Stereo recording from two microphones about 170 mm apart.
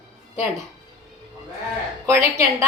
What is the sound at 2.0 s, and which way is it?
Speech, 15° right (ahead or behind).